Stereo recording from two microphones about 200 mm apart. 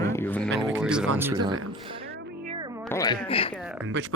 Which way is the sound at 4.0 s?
60° right (ahead or behind).